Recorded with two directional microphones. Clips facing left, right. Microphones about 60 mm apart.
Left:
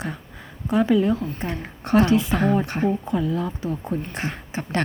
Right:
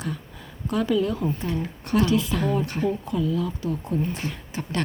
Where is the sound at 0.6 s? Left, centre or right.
Left.